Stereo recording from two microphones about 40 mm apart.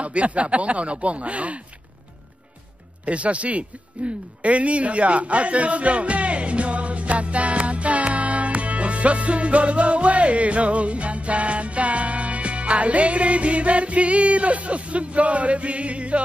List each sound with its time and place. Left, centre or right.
0.0 s speech: right
3.1 s speech: right